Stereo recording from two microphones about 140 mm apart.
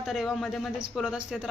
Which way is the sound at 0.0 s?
Centre (ahead or behind).